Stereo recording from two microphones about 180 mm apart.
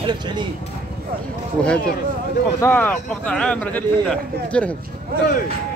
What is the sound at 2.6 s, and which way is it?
A man's voice, 10° left (ahead or behind).